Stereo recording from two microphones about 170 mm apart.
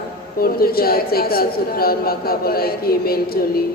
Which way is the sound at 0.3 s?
60° left (ahead or behind).